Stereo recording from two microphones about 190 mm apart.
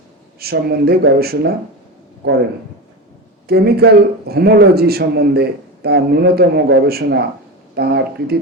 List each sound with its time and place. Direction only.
0.3 s a man's voice: 55° right (ahead or behind)
3.4 s a man's voice: 55° right (ahead or behind)